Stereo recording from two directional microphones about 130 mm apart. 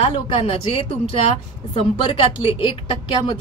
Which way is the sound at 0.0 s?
45° left (ahead or behind).